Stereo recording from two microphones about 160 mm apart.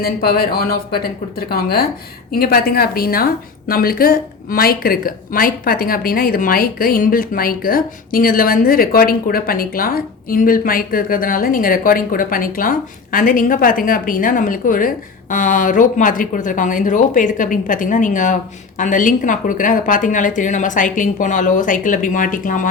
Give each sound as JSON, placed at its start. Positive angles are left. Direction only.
{"t": 0.0, "sound": "a woman's voice", "side_deg": 75}